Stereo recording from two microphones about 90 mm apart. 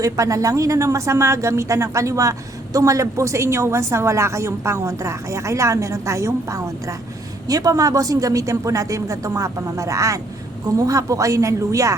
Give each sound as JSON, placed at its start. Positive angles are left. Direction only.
{"t": 0.0, "sound": "a woman's voice", "side_deg": -40}